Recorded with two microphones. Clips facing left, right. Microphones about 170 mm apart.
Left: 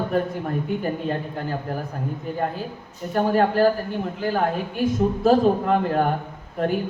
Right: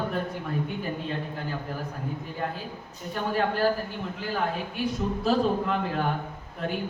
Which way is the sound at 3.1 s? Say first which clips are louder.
Left 8 dB; 45° left (ahead or behind).